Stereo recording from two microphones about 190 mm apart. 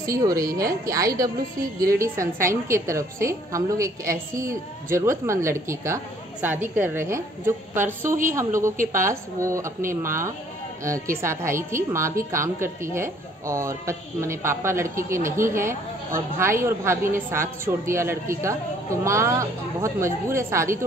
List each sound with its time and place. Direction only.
0.0 s a woman's voice: 20° right (ahead or behind)
0.5 s a woman's voice: 50° right (ahead or behind)
0.8 s a woman's voice: 20° right (ahead or behind)
8.7 s a woman's voice: 45° right (ahead or behind)
9.1 s a woman's voice: 15° right (ahead or behind)